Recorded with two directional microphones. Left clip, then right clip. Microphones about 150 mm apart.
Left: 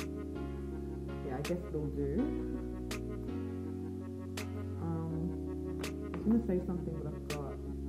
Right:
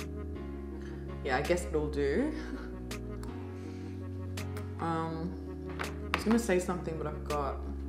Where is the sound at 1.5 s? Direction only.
20° right (ahead or behind).